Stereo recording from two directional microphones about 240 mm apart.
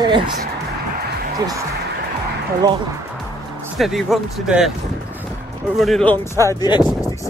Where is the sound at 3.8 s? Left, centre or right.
Centre.